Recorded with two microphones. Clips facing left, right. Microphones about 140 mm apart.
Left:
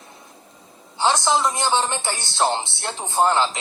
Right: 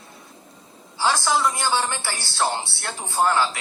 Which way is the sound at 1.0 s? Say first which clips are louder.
Left 2 dB; 20° left (ahead or behind).